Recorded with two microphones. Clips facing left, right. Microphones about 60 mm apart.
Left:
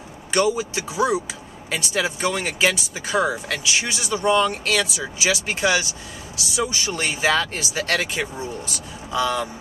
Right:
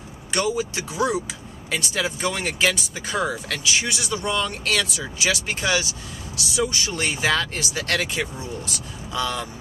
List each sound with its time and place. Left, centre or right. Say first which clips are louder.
0.3 s speech: left 3 dB; centre